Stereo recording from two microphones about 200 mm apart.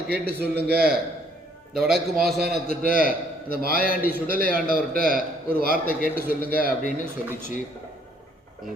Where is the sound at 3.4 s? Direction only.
50° right (ahead or behind).